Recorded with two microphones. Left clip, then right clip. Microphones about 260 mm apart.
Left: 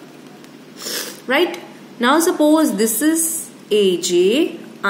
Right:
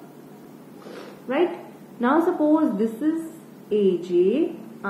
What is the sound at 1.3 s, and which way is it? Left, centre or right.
A woman's voice, left.